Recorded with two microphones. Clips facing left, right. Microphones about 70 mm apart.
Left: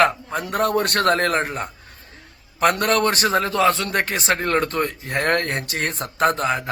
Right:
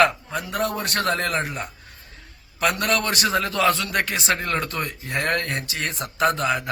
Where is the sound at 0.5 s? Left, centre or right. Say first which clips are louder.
Left 5 dB; left.